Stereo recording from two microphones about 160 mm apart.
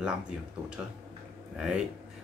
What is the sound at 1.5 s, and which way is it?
Speech, 5° right (ahead or behind).